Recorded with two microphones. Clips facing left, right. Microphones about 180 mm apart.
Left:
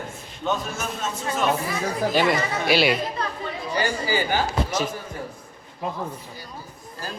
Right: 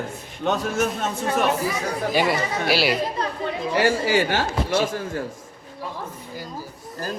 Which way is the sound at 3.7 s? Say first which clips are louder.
Right 5 dB; 85° right.